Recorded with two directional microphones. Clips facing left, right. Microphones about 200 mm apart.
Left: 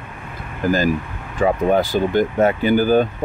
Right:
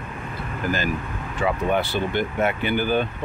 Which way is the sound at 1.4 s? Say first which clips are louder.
Left 6 dB; 45° left (ahead or behind).